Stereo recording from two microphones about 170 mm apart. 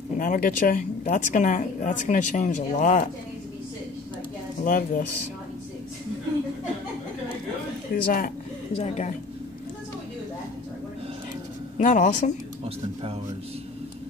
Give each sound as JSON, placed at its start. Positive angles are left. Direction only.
{"t": 0.2, "sound": "speech", "side_deg": 50}
{"t": 4.6, "sound": "speech", "side_deg": 55}
{"t": 7.9, "sound": "speech", "side_deg": 55}
{"t": 8.7, "sound": "speech", "side_deg": 40}
{"t": 11.8, "sound": "speech", "side_deg": 45}